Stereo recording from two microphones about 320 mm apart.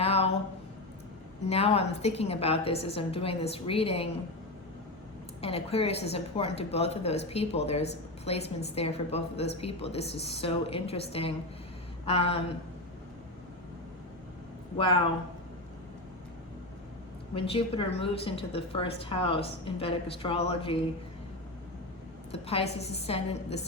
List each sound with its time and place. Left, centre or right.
0.0 s a sound: centre
1.4 s a woman's voice: centre
5.4 s a woman's voice: centre
17.3 s a woman's voice: centre
22.3 s a woman's voice: centre